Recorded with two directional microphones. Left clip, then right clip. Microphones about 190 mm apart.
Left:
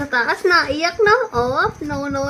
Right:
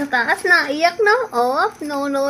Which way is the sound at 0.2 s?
15° left (ahead or behind).